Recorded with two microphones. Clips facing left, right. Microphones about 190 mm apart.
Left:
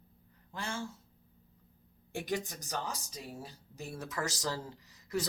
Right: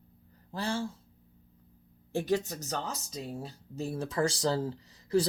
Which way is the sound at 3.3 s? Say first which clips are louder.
Right 6 dB; 30° right (ahead or behind).